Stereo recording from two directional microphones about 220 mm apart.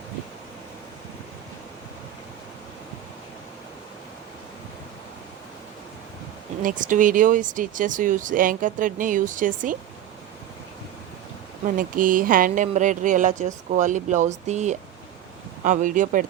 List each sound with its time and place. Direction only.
6.6 s speech: 35° right (ahead or behind)
11.6 s speech: 40° right (ahead or behind)